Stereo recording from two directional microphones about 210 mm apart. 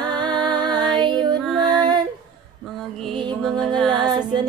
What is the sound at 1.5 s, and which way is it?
Music, 20° right (ahead or behind).